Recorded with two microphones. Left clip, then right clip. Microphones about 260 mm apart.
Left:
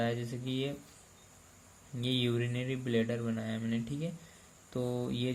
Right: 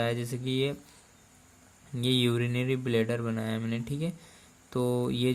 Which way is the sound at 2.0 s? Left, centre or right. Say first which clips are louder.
Right 5 dB; right.